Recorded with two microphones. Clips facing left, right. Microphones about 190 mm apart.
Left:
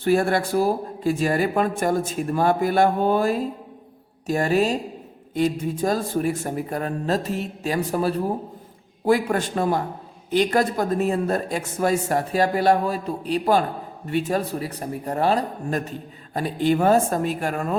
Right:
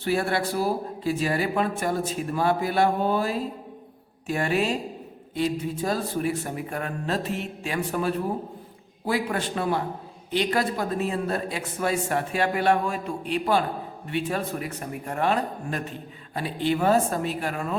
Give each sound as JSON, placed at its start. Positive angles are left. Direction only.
{"t": 0.0, "sound": "speech", "side_deg": 45}